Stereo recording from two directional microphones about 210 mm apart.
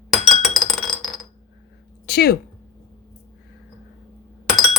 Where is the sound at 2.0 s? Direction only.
50° left (ahead or behind).